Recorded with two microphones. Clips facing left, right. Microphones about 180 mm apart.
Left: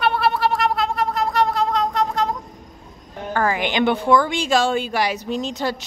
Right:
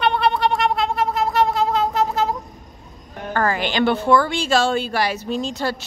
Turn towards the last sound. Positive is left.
turn(degrees=15)  # may be behind; listen again after turning